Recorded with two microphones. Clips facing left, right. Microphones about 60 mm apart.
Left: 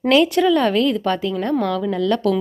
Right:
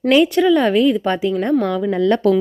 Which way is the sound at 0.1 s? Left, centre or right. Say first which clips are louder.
Right 2 dB; centre.